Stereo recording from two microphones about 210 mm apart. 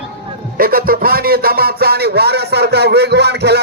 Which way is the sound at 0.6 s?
45° right (ahead or behind).